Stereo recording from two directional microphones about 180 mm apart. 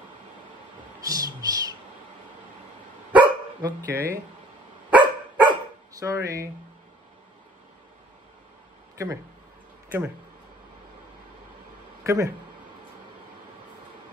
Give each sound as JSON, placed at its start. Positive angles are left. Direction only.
{"t": 1.0, "sound": "music", "side_deg": -20}
{"t": 3.2, "sound": "dog", "side_deg": -20}
{"t": 4.9, "sound": "dog", "side_deg": -25}
{"t": 8.9, "sound": "speech", "side_deg": -15}
{"t": 12.0, "sound": "speech", "side_deg": -15}